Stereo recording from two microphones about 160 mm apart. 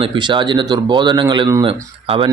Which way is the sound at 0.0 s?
30° right (ahead or behind).